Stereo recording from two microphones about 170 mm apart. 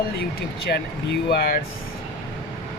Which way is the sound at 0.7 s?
75° left (ahead or behind).